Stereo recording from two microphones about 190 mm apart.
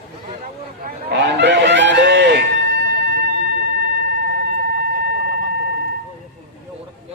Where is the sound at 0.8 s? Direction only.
60° right (ahead or behind).